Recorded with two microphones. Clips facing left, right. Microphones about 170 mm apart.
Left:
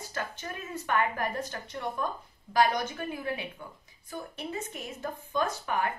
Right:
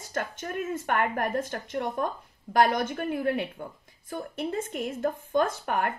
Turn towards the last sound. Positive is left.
turn(degrees=-55)  # may be behind; listen again after turning